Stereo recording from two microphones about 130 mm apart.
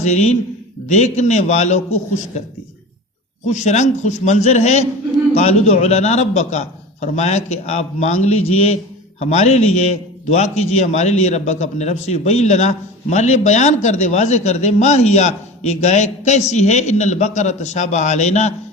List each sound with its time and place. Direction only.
0.0 s a man's voice: 60° left (ahead or behind)
3.4 s a man's voice: 65° left (ahead or behind)